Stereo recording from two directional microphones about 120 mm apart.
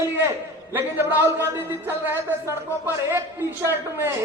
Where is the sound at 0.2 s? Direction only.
20° right (ahead or behind).